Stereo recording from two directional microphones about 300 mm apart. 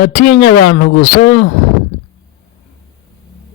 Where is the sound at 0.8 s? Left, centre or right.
Left.